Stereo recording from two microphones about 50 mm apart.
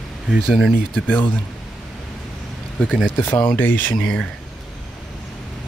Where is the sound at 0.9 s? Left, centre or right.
Left.